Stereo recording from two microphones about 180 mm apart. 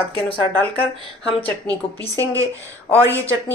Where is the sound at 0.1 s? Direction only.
30° left (ahead or behind).